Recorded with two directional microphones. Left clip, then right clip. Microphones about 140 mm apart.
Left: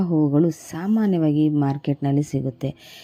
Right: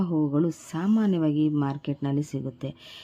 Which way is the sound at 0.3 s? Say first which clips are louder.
Left 6 dB; 20° left (ahead or behind).